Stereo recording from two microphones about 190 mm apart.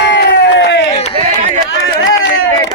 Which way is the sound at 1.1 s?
40° right (ahead or behind).